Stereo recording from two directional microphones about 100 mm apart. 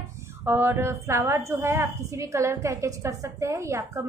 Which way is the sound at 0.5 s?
25° right (ahead or behind).